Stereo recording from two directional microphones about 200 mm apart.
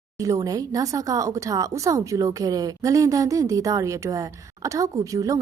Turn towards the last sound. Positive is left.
turn(degrees=-15)  # may be behind; listen again after turning